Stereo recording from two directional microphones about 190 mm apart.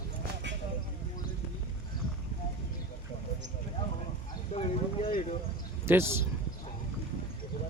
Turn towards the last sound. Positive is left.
turn(degrees=-15)  # may be behind; listen again after turning